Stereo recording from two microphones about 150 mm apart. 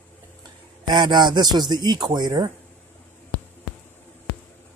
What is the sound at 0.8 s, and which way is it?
Speech, 30° right (ahead or behind).